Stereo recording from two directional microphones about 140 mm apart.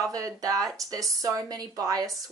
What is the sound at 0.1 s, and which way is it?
A woman's voice, 25° right (ahead or behind).